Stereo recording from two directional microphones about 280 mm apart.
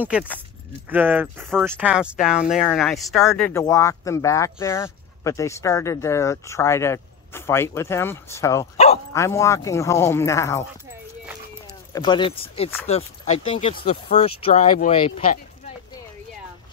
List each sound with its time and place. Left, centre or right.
0.0 s speech: centre
8.7 s bow-wow: left
9.1 s speech: centre
11.9 s speech: centre